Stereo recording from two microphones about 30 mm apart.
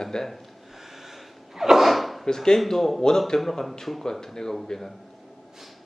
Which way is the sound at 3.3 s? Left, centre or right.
Left.